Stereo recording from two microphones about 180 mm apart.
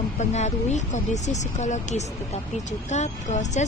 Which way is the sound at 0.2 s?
40° left (ahead or behind).